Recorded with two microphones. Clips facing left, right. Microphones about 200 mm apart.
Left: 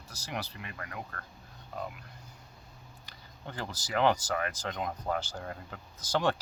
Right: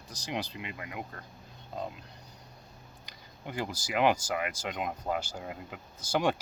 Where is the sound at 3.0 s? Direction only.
15° right (ahead or behind).